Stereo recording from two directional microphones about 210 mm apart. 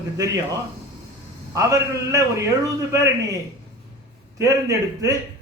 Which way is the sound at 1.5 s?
15° right (ahead or behind).